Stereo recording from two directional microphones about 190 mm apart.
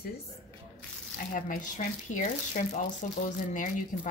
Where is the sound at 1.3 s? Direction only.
45° left (ahead or behind).